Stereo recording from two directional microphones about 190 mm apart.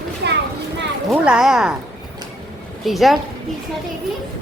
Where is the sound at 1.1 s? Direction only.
5° right (ahead or behind).